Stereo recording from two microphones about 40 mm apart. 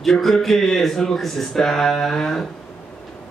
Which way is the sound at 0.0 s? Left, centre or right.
Centre.